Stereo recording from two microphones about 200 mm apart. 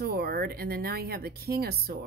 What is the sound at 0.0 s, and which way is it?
A woman's voice, 50° right (ahead or behind).